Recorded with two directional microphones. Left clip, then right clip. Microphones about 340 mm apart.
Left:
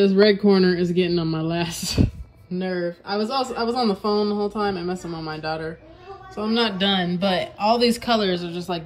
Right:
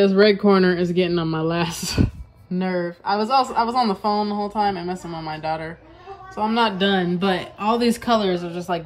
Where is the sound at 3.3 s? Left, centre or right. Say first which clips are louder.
Right 5 dB; centre.